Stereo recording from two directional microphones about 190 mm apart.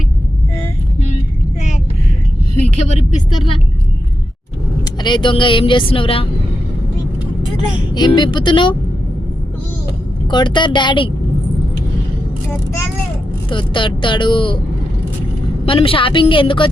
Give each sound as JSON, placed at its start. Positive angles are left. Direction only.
{"t": 5.0, "sound": "speech", "side_deg": 25}
{"t": 7.9, "sound": "speech", "side_deg": 25}
{"t": 10.2, "sound": "speech", "side_deg": 25}
{"t": 13.5, "sound": "speech", "side_deg": 25}
{"t": 15.6, "sound": "speech", "side_deg": 30}